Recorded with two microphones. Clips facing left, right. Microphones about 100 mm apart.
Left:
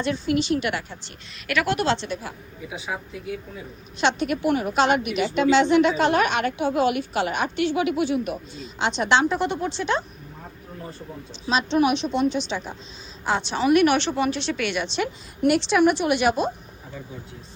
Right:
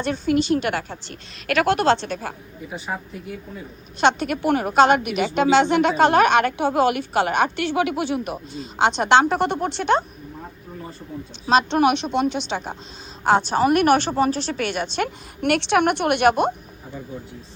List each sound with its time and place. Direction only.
0.0 s a woman's voice: 50° right (ahead or behind)
2.6 s speech: 5° left (ahead or behind)
4.0 s a woman's voice: 50° right (ahead or behind)
11.4 s a woman's voice: 60° right (ahead or behind)
13.2 s a woman's voice: 50° right (ahead or behind)